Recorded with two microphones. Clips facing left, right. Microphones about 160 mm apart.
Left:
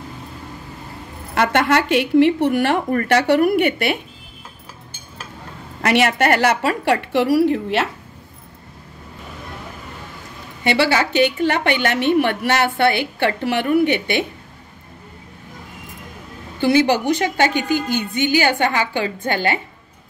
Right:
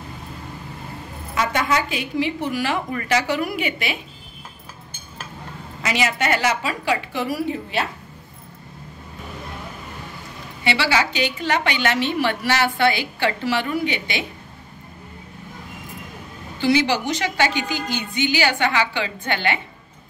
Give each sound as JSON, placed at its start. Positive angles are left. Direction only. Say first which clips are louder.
{"t": 1.3, "sound": "a woman's voice", "louder": "left 5 dB", "side_deg": 65}
{"t": 5.8, "sound": "a woman's voice", "louder": "left 6 dB", "side_deg": 60}
{"t": 10.6, "sound": "a woman's voice", "louder": "left 4 dB", "side_deg": 50}
{"t": 16.5, "sound": "a woman's voice", "louder": "left 4 dB", "side_deg": 50}